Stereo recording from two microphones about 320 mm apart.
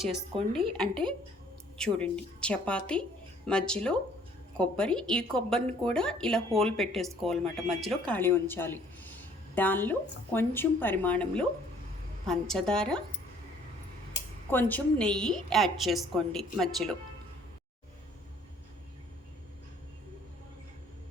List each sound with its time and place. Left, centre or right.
0.3 s speech: centre
0.7 s speech: centre
14.5 s speech: centre